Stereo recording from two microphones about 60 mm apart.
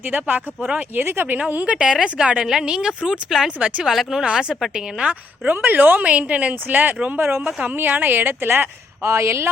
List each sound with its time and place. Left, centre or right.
0.0 s a woman's voice: right
1.4 s a woman's voice: right
1.7 s speech: centre
5.5 s a woman's voice: right
9.0 s speech: right